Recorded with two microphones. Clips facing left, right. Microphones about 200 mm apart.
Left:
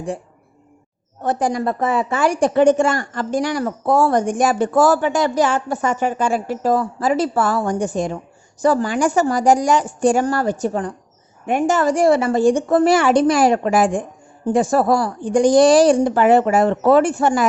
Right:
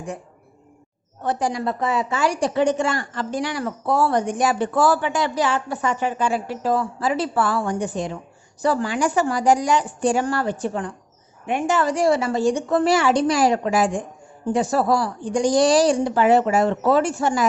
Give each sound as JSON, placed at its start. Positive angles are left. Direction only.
{"t": 1.2, "sound": "a woman's voice", "side_deg": 50}